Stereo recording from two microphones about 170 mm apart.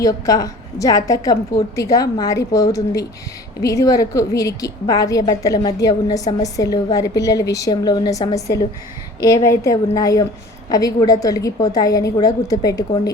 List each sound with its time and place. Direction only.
0.0 s a woman's voice: 20° left (ahead or behind)